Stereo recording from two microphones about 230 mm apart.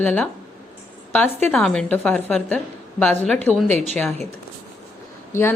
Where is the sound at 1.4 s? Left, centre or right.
Centre.